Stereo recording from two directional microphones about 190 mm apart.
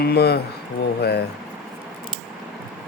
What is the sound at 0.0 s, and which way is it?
Speech, 55° left (ahead or behind).